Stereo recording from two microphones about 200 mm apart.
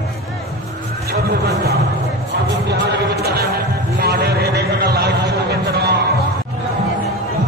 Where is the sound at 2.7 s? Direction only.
50° right (ahead or behind).